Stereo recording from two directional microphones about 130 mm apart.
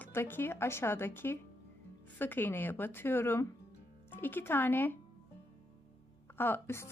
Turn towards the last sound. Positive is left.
turn(degrees=20)  # may be behind; listen again after turning